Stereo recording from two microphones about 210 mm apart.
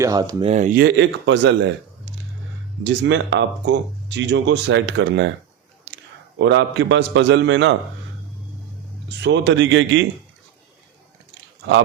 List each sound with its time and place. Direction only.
0.0 s speech: 15° right (ahead or behind)
0.5 s speech: 35° right (ahead or behind)
0.8 s speech: 55° right (ahead or behind)
2.8 s speech: 60° right (ahead or behind)
5.9 s a sound: 55° right (ahead or behind)
6.4 s speech: 60° right (ahead or behind)
9.0 s speech: 55° right (ahead or behind)